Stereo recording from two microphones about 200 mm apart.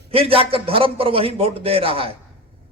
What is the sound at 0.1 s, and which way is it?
A man's voice, 25° right (ahead or behind).